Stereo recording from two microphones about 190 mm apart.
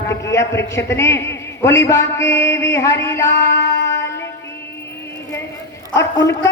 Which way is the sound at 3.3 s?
60° left (ahead or behind).